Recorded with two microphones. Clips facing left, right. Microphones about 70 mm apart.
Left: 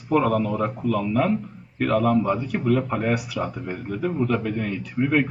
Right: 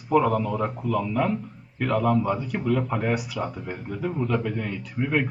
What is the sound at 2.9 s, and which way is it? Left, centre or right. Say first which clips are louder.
Speech: left 2 dB; left.